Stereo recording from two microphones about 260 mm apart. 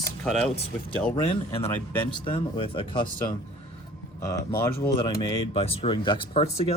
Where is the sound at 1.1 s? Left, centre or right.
Centre.